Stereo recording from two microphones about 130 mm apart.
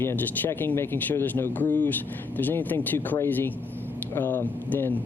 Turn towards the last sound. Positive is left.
turn(degrees=15)  # may be behind; listen again after turning